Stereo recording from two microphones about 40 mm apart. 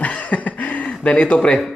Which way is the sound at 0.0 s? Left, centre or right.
Left.